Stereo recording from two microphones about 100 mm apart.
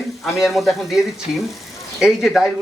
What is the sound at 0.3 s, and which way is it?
Speech, centre (ahead or behind).